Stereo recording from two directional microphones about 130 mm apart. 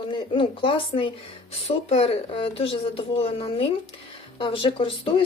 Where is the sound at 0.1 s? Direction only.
40° left (ahead or behind).